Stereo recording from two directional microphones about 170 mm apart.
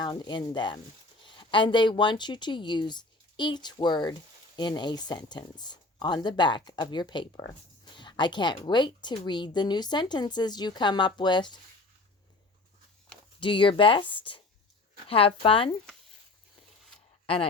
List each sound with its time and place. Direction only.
0.0 s a woman's voice: 25° left (ahead or behind)
13.4 s a woman's voice: 30° left (ahead or behind)
17.2 s speech: 35° left (ahead or behind)